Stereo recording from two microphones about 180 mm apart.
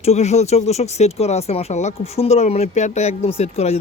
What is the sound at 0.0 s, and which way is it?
Speech, 35° left (ahead or behind).